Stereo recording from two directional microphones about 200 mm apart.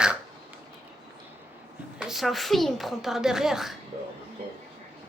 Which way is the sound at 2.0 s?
Centre (ahead or behind).